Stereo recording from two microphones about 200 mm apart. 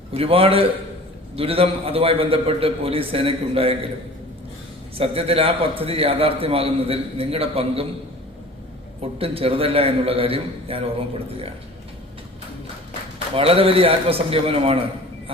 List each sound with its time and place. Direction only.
0.1 s a man's voice: 30° right (ahead or behind)
4.9 s a man's voice: 30° right (ahead or behind)
9.1 s a man's voice: 30° right (ahead or behind)
13.3 s a man's voice: 30° right (ahead or behind)